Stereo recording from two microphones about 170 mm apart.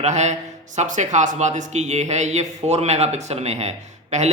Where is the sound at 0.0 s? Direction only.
45° right (ahead or behind).